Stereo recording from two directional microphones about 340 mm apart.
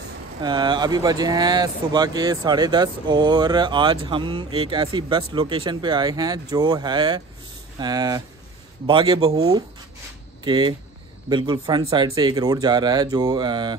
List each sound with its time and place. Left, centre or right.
0.4 s speech: centre